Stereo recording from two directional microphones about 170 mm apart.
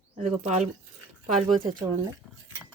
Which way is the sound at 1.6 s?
25° right (ahead or behind).